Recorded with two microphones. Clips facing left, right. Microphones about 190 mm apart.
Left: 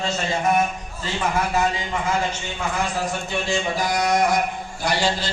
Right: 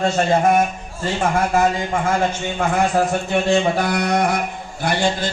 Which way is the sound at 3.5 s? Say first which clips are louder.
Right 5 dB; 60° right (ahead or behind).